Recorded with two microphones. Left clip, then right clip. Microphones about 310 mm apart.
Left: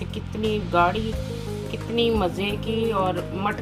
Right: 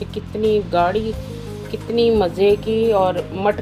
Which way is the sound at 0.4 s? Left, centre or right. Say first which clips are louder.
Right 4 dB; centre.